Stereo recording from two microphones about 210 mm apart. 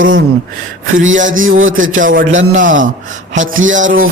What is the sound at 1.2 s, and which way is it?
Speech, 40° right (ahead or behind).